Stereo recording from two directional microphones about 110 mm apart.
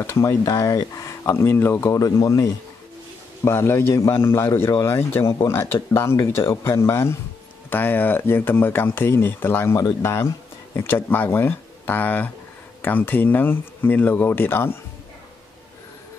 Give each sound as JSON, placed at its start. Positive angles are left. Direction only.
{"t": 0.0, "sound": "speech", "side_deg": 25}